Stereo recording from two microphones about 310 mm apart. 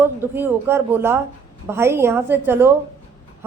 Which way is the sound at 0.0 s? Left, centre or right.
Centre.